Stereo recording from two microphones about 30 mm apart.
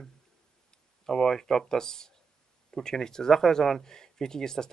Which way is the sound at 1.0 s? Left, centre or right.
Centre.